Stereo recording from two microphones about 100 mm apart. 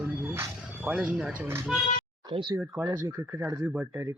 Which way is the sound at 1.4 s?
20° right (ahead or behind).